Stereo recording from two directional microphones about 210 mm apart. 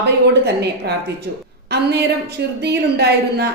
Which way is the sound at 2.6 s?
50° right (ahead or behind).